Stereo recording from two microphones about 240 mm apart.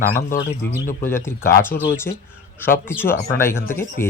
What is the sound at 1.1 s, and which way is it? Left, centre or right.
Speech, centre.